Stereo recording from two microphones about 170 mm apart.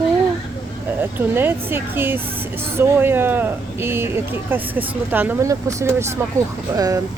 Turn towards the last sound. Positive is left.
turn(degrees=-20)  # may be behind; listen again after turning